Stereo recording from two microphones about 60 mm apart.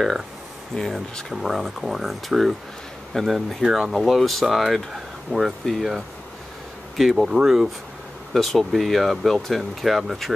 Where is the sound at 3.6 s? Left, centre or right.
Centre.